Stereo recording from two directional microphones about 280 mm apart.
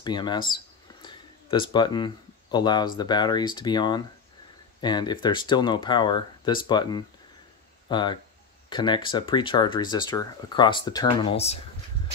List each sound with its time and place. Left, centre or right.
0.0 s speech: centre
1.0 s a sound: centre
3.0 s speech: centre